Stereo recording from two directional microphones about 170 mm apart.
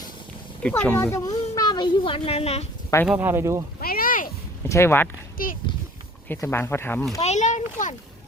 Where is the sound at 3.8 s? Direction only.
60° left (ahead or behind).